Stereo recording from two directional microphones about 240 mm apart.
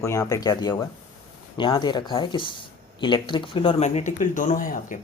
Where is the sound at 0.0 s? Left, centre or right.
Centre.